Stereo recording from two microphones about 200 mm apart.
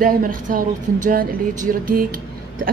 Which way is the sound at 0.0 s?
45° right (ahead or behind).